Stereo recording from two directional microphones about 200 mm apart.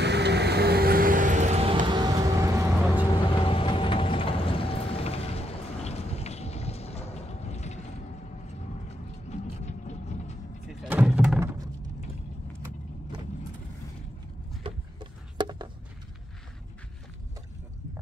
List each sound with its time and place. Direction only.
0.0 s vehicle: 60° right (ahead or behind); by 3.1 s 15° right (ahead or behind)
3.3 s vehicle: 25° left (ahead or behind)
9.3 s vehicle: 35° left (ahead or behind)
10.7 s vehicle: 5° right (ahead or behind)
11.3 s a sound: 15° right (ahead or behind)
14.6 s a sound: 20° right (ahead or behind)